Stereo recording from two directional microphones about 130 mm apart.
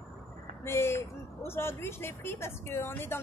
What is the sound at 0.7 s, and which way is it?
Speech, 20° left (ahead or behind).